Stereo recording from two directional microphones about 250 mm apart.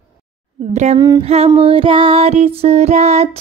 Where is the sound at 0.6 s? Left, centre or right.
Right.